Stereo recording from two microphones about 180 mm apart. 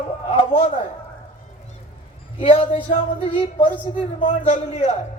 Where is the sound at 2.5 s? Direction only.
40° left (ahead or behind).